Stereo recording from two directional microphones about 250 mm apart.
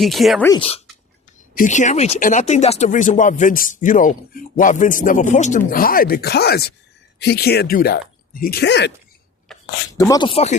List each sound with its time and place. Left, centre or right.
0.0 s speech: centre
0.4 s speech: centre
1.5 s speech: left
9.5 s a sound: centre
10.0 s speech: centre